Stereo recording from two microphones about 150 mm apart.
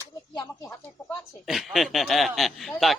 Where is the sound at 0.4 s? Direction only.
15° left (ahead or behind).